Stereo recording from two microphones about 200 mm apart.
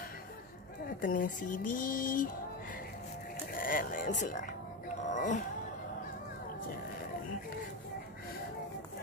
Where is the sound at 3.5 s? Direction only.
45° left (ahead or behind).